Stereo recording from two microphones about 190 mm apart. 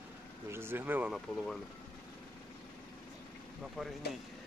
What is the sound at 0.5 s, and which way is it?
Speech, 10° right (ahead or behind).